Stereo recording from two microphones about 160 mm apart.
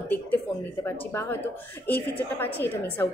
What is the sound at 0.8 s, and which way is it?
A woman's voice, 15° left (ahead or behind).